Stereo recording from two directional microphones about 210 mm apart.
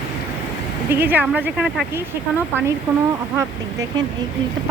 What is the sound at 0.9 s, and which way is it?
Speech, 10° right (ahead or behind).